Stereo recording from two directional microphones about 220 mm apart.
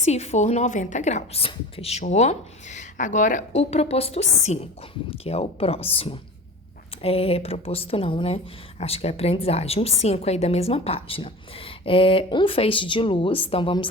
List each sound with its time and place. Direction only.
0.0 s a woman's voice: 30° left (ahead or behind)